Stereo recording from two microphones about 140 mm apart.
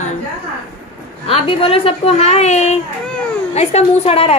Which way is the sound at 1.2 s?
40° left (ahead or behind).